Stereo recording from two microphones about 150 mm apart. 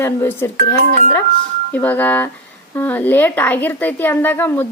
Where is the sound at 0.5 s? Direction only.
55° right (ahead or behind).